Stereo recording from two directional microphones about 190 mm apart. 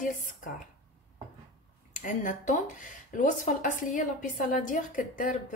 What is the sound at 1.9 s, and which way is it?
Speech, 45° left (ahead or behind).